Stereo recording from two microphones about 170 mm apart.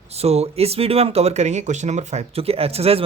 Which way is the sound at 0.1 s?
35° right (ahead or behind).